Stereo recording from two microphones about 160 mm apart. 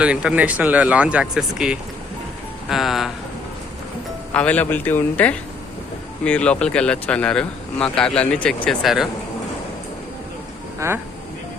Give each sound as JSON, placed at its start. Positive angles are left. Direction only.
{"t": 0.0, "sound": "speech", "side_deg": -5}
{"t": 4.4, "sound": "speech", "side_deg": 10}
{"t": 10.8, "sound": "speech", "side_deg": -15}